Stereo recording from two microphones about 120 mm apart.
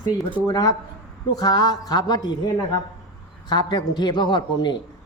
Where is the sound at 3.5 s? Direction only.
35° left (ahead or behind).